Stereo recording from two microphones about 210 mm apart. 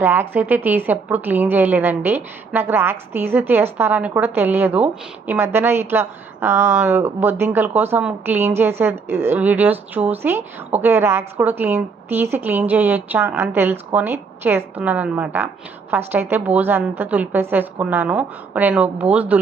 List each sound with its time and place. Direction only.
0.0 s a woman's voice: 10° right (ahead or behind)